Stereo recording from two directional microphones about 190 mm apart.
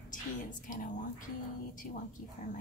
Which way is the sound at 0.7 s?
45° left (ahead or behind).